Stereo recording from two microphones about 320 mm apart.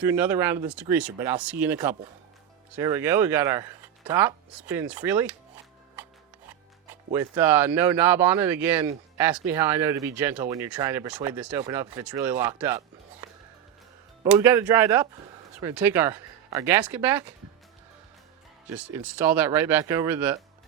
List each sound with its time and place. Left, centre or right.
0.0 s speech: centre
6.0 s music: centre
6.9 s speech: centre
14.3 s speech: centre
18.8 s speech: centre